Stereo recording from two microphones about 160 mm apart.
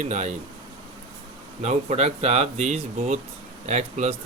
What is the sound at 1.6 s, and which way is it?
Speech, 40° right (ahead or behind).